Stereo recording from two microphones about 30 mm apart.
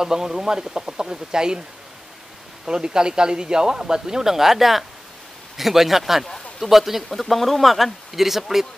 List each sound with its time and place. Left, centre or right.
0.0 s a man's voice: centre
2.6 s a man's voice: right; by 8.6 s centre